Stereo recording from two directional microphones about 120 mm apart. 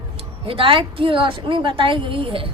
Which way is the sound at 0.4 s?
45° right (ahead or behind).